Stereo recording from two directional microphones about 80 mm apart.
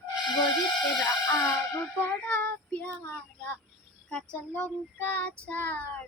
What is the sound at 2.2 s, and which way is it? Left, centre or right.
Child singing, centre.